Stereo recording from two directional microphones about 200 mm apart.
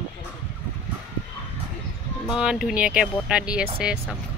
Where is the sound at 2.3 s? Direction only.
5° right (ahead or behind).